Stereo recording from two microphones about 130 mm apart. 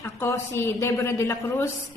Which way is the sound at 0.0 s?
20° left (ahead or behind).